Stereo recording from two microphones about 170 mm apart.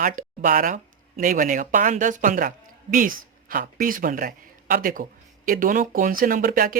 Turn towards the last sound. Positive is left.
turn(degrees=-55)  # may be behind; listen again after turning